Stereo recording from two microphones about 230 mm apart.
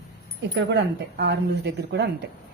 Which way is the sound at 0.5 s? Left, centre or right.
Right.